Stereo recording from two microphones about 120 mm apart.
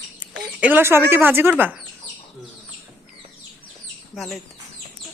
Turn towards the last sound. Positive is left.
turn(degrees=0)  # may be behind; listen again after turning